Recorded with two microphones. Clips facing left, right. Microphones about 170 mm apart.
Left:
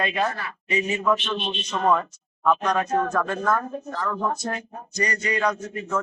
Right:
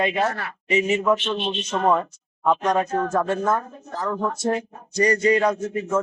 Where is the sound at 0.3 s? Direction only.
65° right (ahead or behind).